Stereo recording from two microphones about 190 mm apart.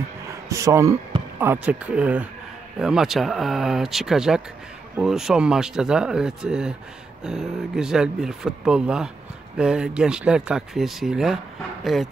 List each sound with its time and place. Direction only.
0.5 s speech: 15° right (ahead or behind); by 12.1 s centre (ahead or behind)